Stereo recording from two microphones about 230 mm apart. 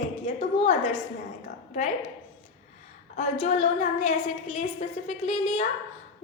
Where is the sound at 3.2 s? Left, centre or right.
Left.